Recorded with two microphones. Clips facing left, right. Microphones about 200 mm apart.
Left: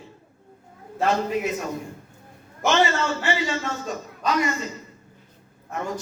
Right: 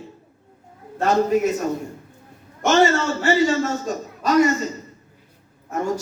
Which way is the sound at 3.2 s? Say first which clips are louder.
Right 7 dB; 40° right (ahead or behind).